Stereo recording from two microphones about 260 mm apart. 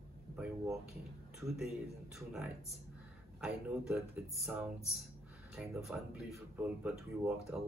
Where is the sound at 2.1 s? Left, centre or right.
Centre.